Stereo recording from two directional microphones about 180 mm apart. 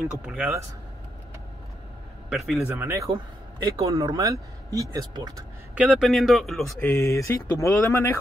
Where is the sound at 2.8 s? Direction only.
15° right (ahead or behind).